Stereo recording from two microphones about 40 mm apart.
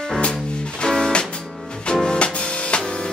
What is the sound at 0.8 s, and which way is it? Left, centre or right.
Music, left.